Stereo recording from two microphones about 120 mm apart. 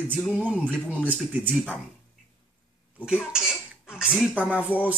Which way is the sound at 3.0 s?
5° right (ahead or behind).